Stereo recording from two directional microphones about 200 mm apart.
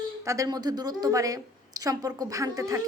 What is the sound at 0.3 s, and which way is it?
Speech, 20° right (ahead or behind).